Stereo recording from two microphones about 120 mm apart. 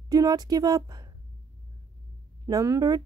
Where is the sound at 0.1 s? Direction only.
30° right (ahead or behind).